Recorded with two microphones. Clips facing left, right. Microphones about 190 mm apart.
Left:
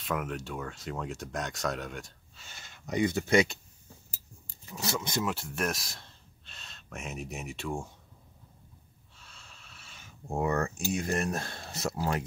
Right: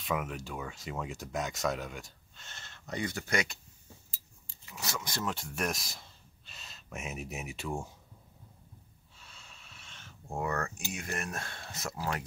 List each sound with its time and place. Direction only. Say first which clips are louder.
0.0 s speech: left 1 dB; centre (ahead or behind); by 3.5 s 25° left (ahead or behind)
4.6 s speech: left 6 dB; 30° left (ahead or behind)
5.2 s speech: left 3 dB; 5° left (ahead or behind)
9.1 s snort: even; centre (ahead or behind)
10.2 s speech: left 5 dB; 25° left (ahead or behind)